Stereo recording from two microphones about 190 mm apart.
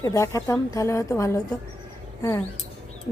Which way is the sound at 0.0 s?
15° left (ahead or behind).